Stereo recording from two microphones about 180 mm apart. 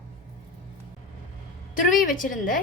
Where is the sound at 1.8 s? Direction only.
50° left (ahead or behind).